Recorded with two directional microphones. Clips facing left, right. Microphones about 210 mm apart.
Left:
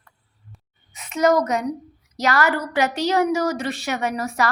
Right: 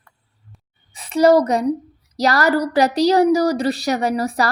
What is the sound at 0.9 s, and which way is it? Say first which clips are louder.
A woman's voice: right 5 dB; 35° right (ahead or behind).